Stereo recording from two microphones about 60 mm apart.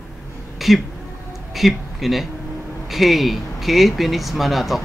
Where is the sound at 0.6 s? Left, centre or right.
Centre.